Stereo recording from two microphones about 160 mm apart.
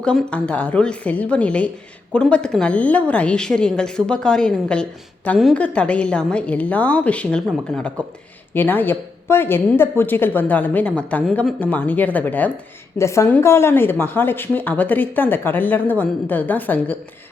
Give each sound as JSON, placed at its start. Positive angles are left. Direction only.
{"t": 0.0, "sound": "speech", "side_deg": 5}